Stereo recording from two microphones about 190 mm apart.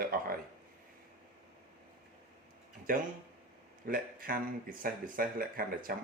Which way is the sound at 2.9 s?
50° right (ahead or behind).